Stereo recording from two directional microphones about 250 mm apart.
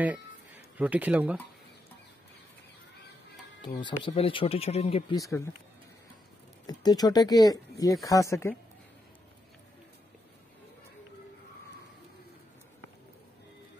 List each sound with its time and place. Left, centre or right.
0.7 s speech: centre
3.6 s speech: centre
6.6 s speech: centre